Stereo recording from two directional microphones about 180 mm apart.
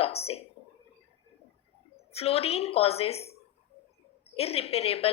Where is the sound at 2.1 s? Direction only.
35° left (ahead or behind).